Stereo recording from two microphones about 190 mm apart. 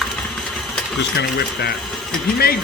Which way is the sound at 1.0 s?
60° left (ahead or behind).